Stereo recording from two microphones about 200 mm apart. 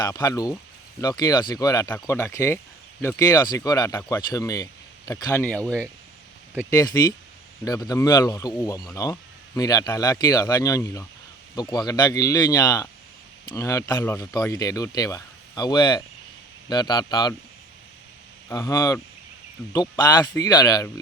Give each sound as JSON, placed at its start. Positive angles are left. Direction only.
{"t": 0.0, "sound": "speech", "side_deg": 20}
{"t": 5.4, "sound": "speech", "side_deg": 5}
{"t": 6.7, "sound": "speech", "side_deg": 15}
{"t": 18.4, "sound": "speech", "side_deg": 15}